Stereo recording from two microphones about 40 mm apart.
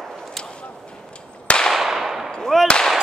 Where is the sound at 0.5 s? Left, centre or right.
Left.